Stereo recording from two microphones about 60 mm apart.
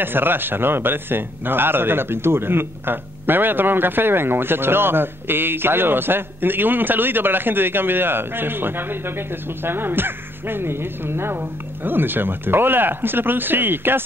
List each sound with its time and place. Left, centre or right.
0.0 s a man's voice: right